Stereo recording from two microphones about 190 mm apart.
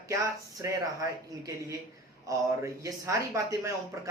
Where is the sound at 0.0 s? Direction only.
15° right (ahead or behind).